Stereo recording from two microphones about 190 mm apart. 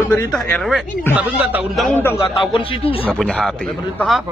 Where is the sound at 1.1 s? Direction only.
10° right (ahead or behind).